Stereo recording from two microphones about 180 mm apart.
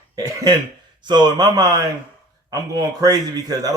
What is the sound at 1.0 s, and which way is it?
A man's voice, 25° right (ahead or behind).